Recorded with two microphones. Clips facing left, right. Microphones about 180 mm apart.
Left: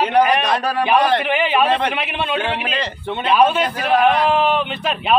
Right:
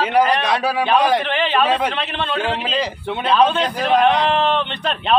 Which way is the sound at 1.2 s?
10° left (ahead or behind).